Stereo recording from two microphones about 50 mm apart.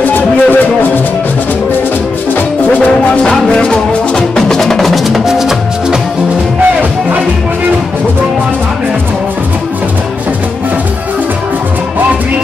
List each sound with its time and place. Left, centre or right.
0.0 s music: left
2.9 s music: centre
6.6 s music: right